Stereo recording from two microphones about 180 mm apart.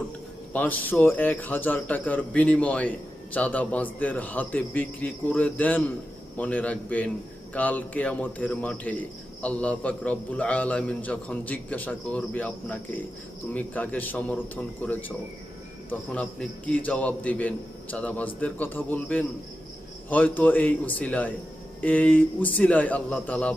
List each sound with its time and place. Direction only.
0.5 s speech: 10° left (ahead or behind)